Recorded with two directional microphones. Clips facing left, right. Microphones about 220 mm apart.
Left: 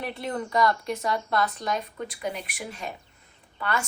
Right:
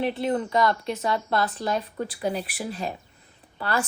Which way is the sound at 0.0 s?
25° right (ahead or behind).